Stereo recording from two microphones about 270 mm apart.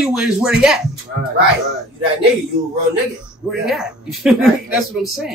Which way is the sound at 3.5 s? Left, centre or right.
Centre.